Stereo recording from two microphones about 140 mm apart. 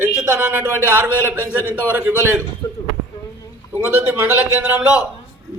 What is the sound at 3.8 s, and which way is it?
A man's voice, 15° right (ahead or behind).